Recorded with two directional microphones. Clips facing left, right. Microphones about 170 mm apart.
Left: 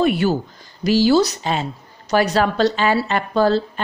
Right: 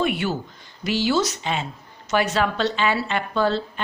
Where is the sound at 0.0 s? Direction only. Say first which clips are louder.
Left 6 dB; 35° left (ahead or behind).